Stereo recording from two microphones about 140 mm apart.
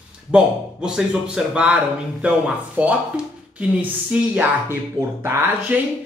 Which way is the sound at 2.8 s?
10° right (ahead or behind).